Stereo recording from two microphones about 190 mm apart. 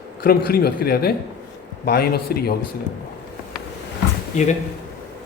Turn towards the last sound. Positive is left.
turn(degrees=35)  # may be behind; listen again after turning